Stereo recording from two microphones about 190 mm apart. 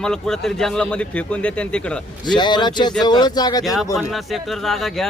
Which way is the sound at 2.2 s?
25° left (ahead or behind).